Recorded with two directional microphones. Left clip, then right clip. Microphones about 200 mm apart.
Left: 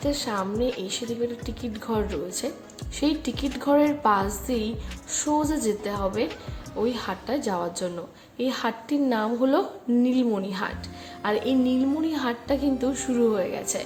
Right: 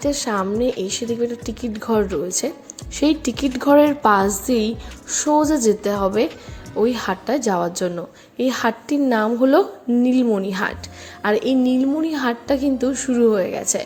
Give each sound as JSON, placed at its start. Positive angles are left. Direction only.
{"t": 0.0, "sound": "a woman's voice", "side_deg": -25}